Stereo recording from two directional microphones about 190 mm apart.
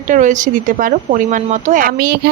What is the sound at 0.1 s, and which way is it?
Speech, 40° right (ahead or behind).